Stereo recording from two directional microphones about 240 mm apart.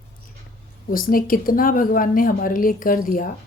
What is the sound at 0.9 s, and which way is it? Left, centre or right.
A woman's voice, left.